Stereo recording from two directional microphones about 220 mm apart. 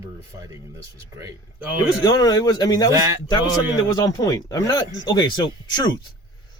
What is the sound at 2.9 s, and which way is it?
Speech, 15° right (ahead or behind).